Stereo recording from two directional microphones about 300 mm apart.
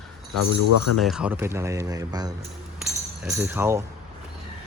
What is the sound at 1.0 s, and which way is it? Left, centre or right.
Speech, centre.